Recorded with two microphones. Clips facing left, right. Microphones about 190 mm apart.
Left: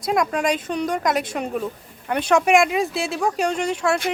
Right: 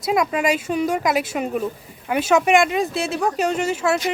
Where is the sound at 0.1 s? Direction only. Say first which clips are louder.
Right 1 dB; 5° right (ahead or behind).